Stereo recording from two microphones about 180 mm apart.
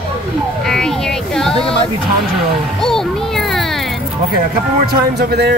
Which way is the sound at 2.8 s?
Centre (ahead or behind).